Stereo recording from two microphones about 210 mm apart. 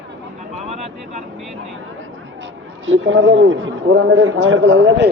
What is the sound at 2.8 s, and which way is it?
A man's voice, 65° right (ahead or behind).